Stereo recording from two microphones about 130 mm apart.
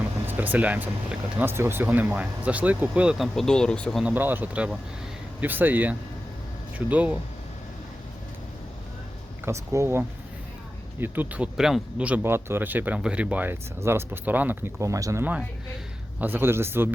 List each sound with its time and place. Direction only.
0.3 s speech: 15° right (ahead or behind); by 4.0 s 5° left (ahead or behind)
4.0 s speech: 15° right (ahead or behind)
9.4 s speech: 20° right (ahead or behind)
16.2 s speech: 15° right (ahead or behind)